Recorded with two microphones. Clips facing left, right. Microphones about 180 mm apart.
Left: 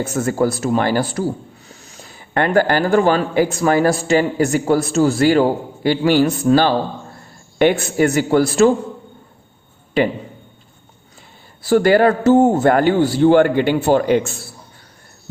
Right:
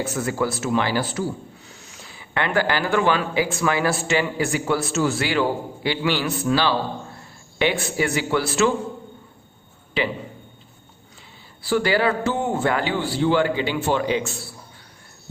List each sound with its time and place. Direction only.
0.1 s a man's voice: 45° left (ahead or behind)
11.6 s speech: 45° left (ahead or behind)